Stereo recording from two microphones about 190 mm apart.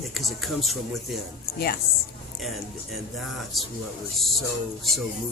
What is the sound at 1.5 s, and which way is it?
Speech, 55° left (ahead or behind).